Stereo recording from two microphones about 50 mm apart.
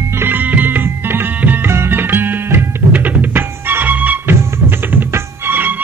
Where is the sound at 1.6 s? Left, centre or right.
Right.